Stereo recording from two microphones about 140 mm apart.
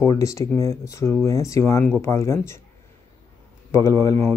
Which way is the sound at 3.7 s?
20° left (ahead or behind).